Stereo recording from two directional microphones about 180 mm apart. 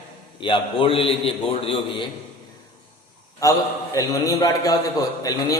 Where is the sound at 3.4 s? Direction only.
20° left (ahead or behind).